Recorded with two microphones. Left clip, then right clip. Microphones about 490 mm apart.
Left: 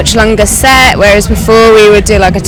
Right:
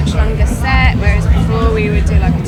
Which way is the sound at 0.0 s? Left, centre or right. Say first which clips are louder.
Left 14 dB; left.